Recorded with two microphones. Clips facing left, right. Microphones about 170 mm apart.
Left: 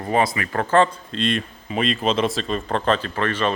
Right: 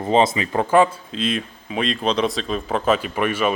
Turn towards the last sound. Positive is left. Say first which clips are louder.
# right 2 dB
turn(degrees=-10)  # may be behind; listen again after turning